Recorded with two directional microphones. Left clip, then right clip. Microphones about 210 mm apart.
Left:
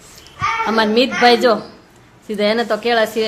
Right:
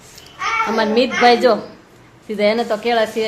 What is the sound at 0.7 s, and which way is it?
A woman's voice, 15° left (ahead or behind).